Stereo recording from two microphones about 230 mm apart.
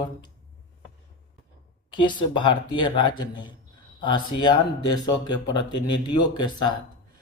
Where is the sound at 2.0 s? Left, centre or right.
Centre.